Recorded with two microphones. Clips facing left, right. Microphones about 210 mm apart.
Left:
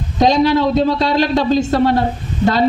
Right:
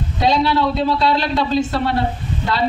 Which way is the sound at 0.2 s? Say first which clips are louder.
Left 4 dB; 45° left (ahead or behind).